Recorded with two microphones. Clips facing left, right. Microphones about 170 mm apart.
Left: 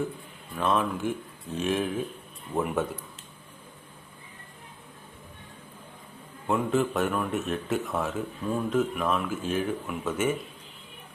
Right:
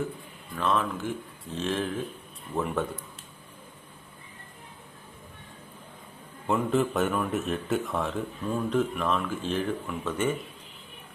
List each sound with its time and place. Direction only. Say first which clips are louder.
0.5 s speech: left 1 dB; 15° left (ahead or behind)
6.5 s speech: even; centre (ahead or behind)